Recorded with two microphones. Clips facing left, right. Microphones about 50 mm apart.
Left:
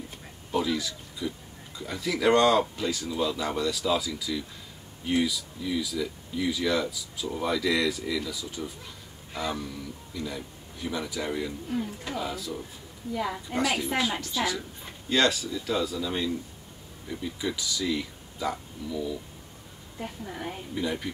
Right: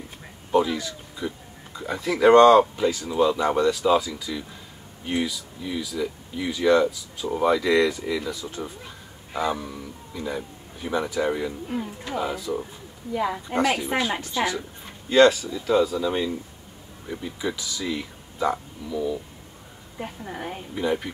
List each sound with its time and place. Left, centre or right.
0.5 s speech: centre
8.6 s a sound: right
9.5 s speech: centre